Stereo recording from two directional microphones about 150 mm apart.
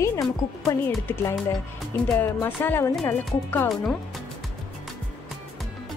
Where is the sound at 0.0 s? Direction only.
20° left (ahead or behind).